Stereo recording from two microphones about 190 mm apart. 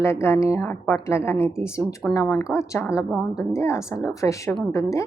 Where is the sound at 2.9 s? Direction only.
5° right (ahead or behind).